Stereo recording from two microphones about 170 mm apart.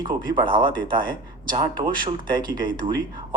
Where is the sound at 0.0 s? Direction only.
25° right (ahead or behind).